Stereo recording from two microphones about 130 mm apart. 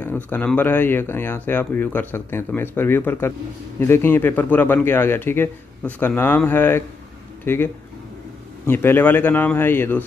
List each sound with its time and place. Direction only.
0.0 s speech: 10° left (ahead or behind)